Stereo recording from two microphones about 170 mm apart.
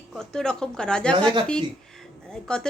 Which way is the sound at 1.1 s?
30° right (ahead or behind).